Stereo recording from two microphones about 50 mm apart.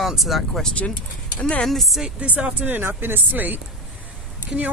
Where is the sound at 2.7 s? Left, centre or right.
Right.